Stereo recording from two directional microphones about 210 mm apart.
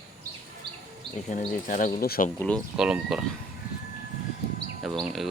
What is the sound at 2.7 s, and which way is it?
Speech, 5° right (ahead or behind).